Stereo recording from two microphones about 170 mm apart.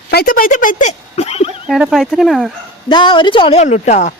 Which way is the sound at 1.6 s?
5° right (ahead or behind).